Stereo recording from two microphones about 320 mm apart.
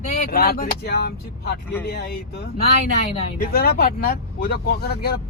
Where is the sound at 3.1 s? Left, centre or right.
Left.